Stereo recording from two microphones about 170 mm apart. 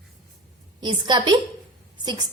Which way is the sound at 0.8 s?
25° right (ahead or behind).